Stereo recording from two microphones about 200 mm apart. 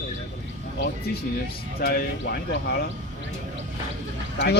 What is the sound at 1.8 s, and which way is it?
Speech, 50° left (ahead or behind).